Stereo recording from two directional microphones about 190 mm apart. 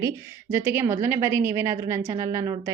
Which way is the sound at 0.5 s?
15° right (ahead or behind).